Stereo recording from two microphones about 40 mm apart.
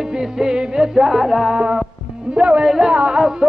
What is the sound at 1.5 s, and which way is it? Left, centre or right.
Music, right.